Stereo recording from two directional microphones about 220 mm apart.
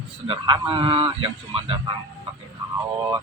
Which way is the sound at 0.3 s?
20° right (ahead or behind).